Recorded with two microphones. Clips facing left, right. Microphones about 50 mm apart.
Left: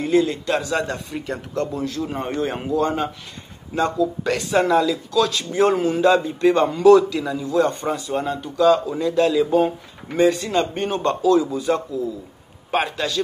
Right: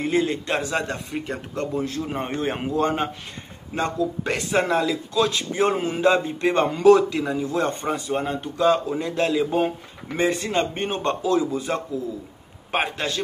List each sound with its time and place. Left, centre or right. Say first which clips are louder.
0.0 s a man's voice: left 4 dB; right